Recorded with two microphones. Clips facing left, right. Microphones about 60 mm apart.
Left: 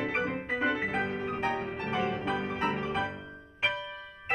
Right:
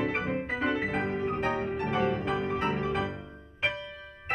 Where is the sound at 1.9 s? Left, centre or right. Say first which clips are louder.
Right 2 dB; right.